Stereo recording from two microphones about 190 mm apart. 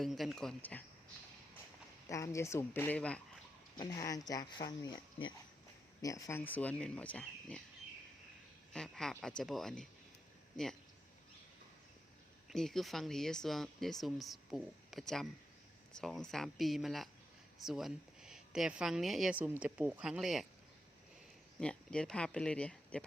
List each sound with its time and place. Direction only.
0.0 s speech: centre (ahead or behind)
2.0 s speech: 15° left (ahead or behind)
3.8 s speech: 20° left (ahead or behind)
6.0 s speech: 15° left (ahead or behind)
8.7 s speech: 5° left (ahead or behind)
12.5 s speech: centre (ahead or behind)
21.6 s speech: 5° left (ahead or behind)